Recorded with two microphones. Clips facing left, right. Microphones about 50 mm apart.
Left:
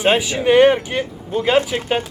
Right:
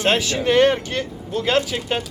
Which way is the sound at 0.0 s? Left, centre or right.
Centre.